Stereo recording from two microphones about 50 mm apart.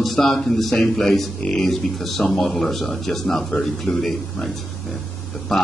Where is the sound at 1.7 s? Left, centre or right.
Centre.